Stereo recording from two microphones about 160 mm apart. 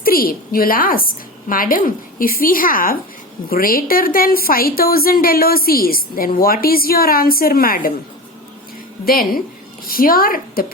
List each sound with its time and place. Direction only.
0.0 s a woman's voice: 65° left (ahead or behind)
9.0 s a woman's voice: 65° left (ahead or behind)